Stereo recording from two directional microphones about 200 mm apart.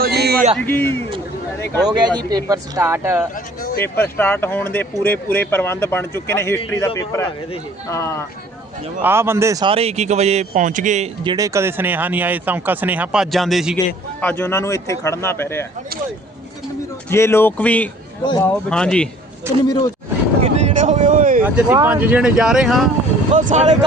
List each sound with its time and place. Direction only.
0.0 s a sound: 55° right (ahead or behind)
0.6 s speech: 10° left (ahead or behind)
1.9 s speech: 20° right (ahead or behind)
3.6 s a sound: 45° left (ahead or behind)
3.8 s speech: 10° left (ahead or behind)
9.0 s speech: 10° right (ahead or behind); by 11.1 s 35° right (ahead or behind)
11.2 s speech: 20° right (ahead or behind); by 15.6 s 10° left (ahead or behind)
17.1 s speech: 10° left (ahead or behind)
19.6 s speech: 20° left (ahead or behind)
20.4 s a sound: 30° right (ahead or behind)
21.4 s speech: 10° right (ahead or behind)
23.3 s speech: 40° right (ahead or behind)